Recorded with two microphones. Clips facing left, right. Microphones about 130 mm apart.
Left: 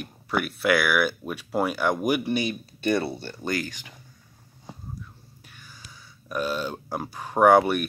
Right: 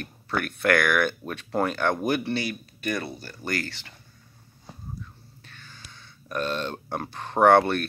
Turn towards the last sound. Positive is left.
turn(degrees=10)  # may be behind; listen again after turning